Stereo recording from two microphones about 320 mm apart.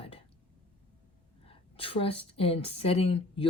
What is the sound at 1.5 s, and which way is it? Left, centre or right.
A woman's voice, centre.